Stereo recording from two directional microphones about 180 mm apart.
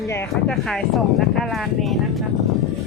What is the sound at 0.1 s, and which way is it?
Speech, 15° left (ahead or behind).